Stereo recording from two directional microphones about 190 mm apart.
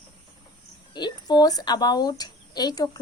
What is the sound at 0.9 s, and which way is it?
Speech, 25° left (ahead or behind).